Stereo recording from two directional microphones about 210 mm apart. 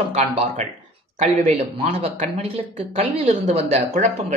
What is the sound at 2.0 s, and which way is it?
Speech, 30° right (ahead or behind).